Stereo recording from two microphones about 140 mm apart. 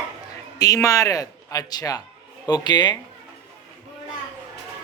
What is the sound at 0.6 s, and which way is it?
A man's voice, 25° left (ahead or behind).